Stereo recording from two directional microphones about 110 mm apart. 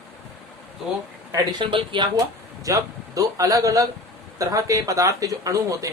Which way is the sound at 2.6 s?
30° right (ahead or behind).